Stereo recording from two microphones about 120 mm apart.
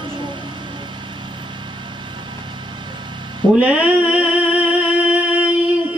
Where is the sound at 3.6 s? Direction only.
10° right (ahead or behind).